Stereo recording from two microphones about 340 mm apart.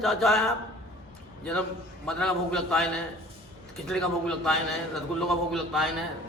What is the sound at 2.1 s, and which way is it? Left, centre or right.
Speech, centre.